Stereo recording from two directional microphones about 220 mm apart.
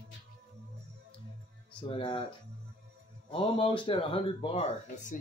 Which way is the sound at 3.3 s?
25° left (ahead or behind).